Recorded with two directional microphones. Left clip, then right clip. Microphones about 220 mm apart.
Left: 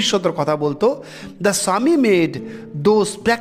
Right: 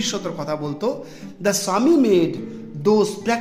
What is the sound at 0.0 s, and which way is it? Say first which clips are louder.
A man's voice: left 8 dB; 35° left (ahead or behind).